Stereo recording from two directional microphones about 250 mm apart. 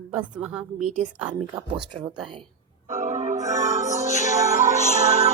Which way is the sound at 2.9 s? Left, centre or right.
Right.